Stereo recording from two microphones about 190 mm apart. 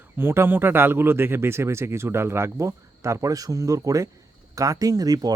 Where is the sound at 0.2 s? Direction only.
10° right (ahead or behind).